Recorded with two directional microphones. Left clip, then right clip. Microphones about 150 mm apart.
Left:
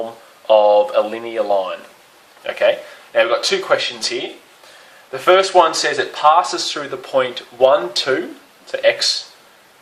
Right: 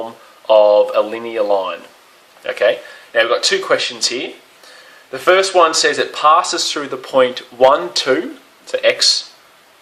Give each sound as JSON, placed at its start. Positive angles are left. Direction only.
{"t": 0.4, "sound": "speech", "side_deg": -20}